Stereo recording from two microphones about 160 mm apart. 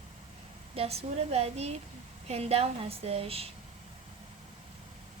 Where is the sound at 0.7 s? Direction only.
40° right (ahead or behind).